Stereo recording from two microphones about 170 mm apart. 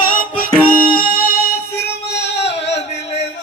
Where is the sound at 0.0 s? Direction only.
55° left (ahead or behind).